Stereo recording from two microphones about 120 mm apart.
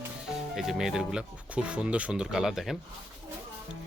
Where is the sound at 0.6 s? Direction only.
5° right (ahead or behind).